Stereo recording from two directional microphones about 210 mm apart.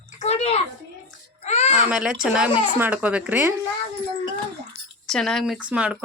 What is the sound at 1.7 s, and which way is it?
A woman's voice, 5° right (ahead or behind).